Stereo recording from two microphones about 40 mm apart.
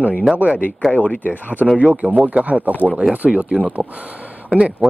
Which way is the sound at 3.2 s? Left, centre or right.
Right.